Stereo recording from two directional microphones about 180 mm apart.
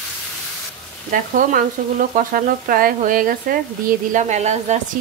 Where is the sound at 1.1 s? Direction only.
50° right (ahead or behind).